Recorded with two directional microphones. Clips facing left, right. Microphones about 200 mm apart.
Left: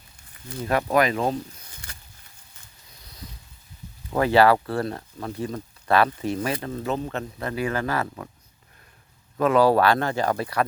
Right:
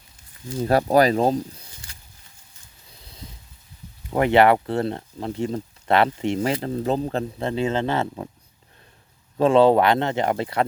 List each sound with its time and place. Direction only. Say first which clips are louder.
0.6 s speech: right 4 dB; 35° right (ahead or behind)
1.9 s a sound: left 3 dB; 60° left (ahead or behind)
4.1 s speech: right 1 dB; 20° right (ahead or behind)
9.4 s speech: right 3 dB; 25° right (ahead or behind)